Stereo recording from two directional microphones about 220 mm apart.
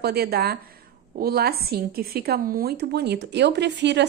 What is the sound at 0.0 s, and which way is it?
Speech, 45° right (ahead or behind).